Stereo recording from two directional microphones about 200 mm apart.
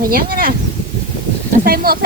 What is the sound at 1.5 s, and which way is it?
Speech, 45° right (ahead or behind).